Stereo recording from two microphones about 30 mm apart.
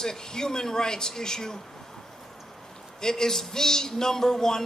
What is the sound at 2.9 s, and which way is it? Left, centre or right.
Speech, centre.